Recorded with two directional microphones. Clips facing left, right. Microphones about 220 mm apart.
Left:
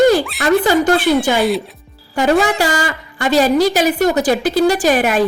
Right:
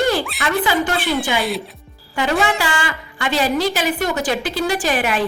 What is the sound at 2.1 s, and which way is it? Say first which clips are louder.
A woman's voice: left 5 dB; 45° left (ahead or behind).